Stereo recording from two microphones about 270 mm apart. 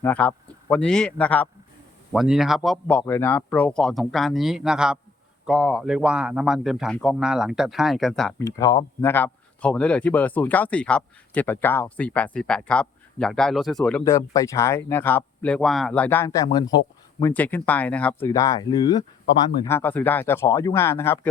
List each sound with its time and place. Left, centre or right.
0.0 s speech: centre
8.4 s speech: centre